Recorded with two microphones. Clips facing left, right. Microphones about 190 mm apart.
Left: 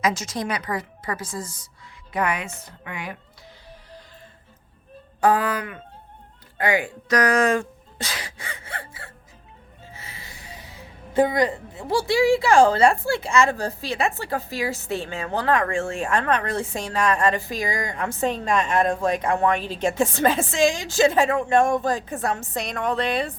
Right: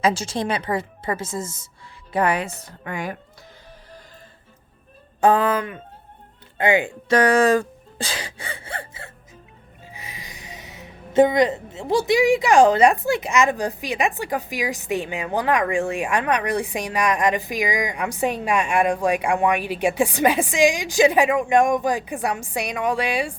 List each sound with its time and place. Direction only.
0.0 s speech: 30° right (ahead or behind)
5.2 s speech: 25° right (ahead or behind)
9.9 s speech: 15° right (ahead or behind)